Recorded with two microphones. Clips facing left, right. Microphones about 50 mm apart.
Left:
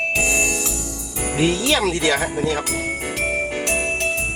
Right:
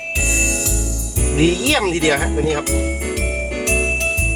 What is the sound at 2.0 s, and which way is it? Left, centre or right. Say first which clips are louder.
Speech: right 3 dB; centre.